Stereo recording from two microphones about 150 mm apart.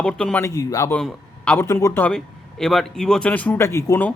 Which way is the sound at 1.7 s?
20° left (ahead or behind).